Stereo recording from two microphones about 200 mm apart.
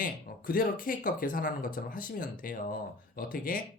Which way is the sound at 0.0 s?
45° left (ahead or behind).